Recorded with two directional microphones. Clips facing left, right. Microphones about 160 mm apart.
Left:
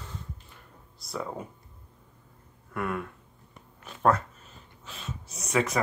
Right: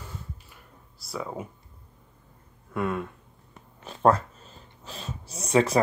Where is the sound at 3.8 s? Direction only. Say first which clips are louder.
Right 3 dB; 30° right (ahead or behind).